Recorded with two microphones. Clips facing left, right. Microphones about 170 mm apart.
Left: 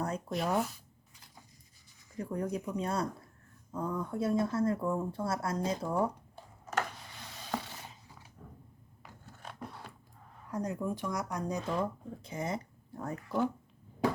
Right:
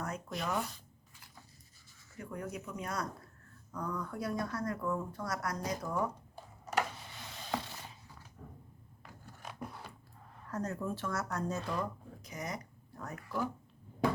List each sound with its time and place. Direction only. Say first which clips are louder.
0.3 s speech: left 5 dB; centre (ahead or behind)
2.1 s speech: left 7 dB; 35° left (ahead or behind)
6.3 s a sound: right 1 dB; 10° right (ahead or behind)
9.4 s a sound: right 1 dB; 5° right (ahead or behind)
10.4 s speech: left 2 dB; 10° left (ahead or behind)
12.2 s speech: left 5 dB; 30° left (ahead or behind)